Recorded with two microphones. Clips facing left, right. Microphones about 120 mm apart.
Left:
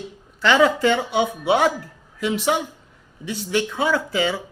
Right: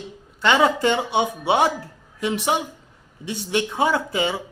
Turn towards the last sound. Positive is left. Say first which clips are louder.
# left 1 dB
turn(degrees=-20)  # may be behind; listen again after turning